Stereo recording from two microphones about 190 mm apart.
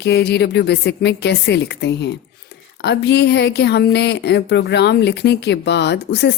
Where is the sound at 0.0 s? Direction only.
60° left (ahead or behind).